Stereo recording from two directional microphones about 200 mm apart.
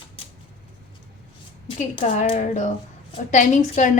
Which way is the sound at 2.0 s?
30° left (ahead or behind).